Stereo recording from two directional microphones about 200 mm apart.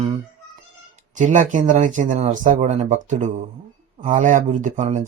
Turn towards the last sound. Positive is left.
turn(degrees=-35)  # may be behind; listen again after turning